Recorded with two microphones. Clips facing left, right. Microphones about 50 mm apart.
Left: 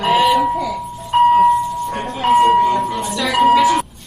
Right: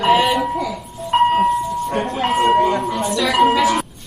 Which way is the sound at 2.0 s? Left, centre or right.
Centre.